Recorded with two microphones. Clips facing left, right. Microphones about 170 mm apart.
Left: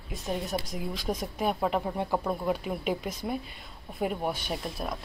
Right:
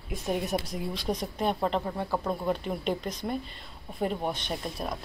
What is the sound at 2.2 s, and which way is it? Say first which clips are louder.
A woman's voice: even; 5° left (ahead or behind).